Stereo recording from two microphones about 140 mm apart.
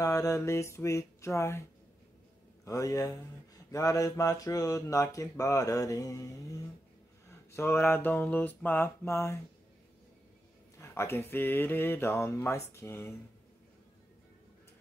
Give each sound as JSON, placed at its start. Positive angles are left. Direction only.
{"t": 0.0, "sound": "speech", "side_deg": 25}
{"t": 2.6, "sound": "speech", "side_deg": 25}
{"t": 10.8, "sound": "speech", "side_deg": 20}